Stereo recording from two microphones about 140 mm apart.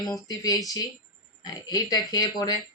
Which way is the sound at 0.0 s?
25° left (ahead or behind).